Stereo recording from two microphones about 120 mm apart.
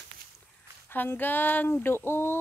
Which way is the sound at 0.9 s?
15° left (ahead or behind).